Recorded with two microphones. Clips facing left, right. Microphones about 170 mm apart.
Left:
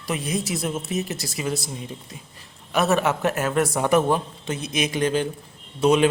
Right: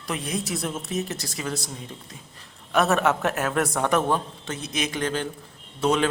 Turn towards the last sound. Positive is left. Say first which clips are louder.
# left 5 dB
turn(degrees=15)  # may be behind; listen again after turning